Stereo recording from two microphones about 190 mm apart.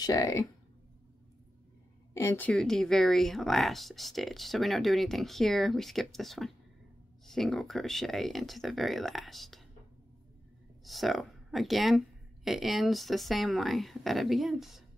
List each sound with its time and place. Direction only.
0.0 s speech: 20° left (ahead or behind)
2.1 s speech: 10° left (ahead or behind)
10.8 s speech: centre (ahead or behind)